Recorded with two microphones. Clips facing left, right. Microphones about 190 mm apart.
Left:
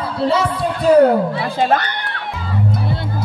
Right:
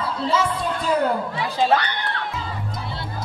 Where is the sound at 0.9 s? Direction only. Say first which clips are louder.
Left 12 dB; 65° left (ahead or behind).